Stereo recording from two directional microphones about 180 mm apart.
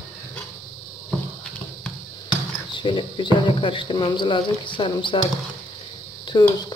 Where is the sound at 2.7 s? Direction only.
25° left (ahead or behind).